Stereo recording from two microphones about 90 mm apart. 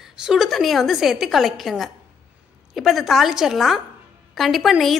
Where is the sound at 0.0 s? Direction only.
5° right (ahead or behind).